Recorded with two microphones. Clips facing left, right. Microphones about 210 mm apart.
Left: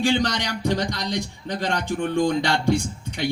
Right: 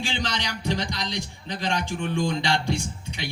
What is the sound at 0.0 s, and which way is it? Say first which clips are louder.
A man's voice: left 8 dB; 60° left (ahead or behind).